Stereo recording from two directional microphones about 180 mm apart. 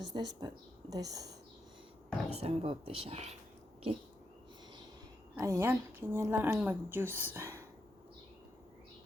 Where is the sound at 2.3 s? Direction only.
35° right (ahead or behind).